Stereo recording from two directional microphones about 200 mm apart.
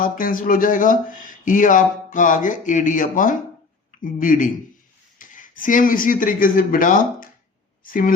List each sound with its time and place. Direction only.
0.0 s speech: 45° left (ahead or behind)